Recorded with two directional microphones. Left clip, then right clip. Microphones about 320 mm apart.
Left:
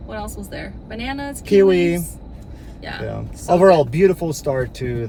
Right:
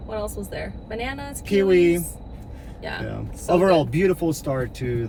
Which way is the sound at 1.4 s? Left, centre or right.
Centre.